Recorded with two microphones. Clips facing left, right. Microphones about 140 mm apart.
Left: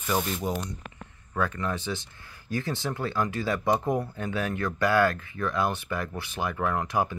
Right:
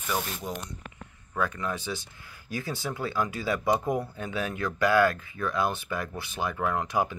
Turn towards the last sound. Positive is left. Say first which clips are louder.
# even
turn(degrees=-15)  # may be behind; listen again after turning